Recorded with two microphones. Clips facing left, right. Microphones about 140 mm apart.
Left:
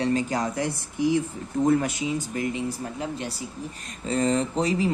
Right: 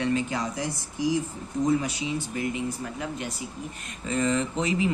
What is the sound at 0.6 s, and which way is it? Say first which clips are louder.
Speech: left 4 dB; 60° left (ahead or behind).